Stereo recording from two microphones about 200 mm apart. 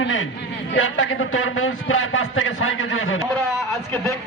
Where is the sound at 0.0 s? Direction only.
80° left.